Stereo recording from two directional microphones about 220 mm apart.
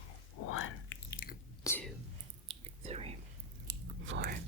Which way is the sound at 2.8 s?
30° right (ahead or behind).